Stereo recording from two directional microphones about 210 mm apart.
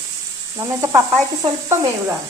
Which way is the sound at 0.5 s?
15° right (ahead or behind).